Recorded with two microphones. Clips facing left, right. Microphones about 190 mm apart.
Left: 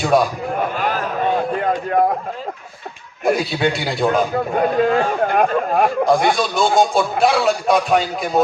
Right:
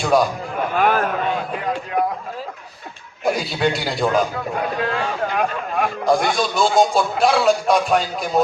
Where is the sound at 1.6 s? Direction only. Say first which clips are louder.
Left 5 dB; 50° left (ahead or behind).